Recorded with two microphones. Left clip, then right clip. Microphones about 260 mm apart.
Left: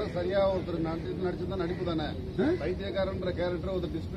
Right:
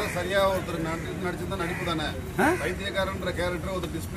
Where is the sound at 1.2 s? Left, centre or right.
Right.